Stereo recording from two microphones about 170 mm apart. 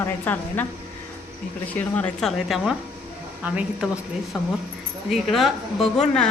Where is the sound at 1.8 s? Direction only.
5° left (ahead or behind).